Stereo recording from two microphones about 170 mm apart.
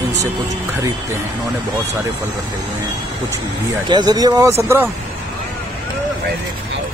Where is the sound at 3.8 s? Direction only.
25° right (ahead or behind).